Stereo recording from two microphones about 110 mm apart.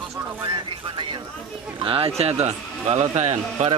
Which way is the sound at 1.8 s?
55° right (ahead or behind).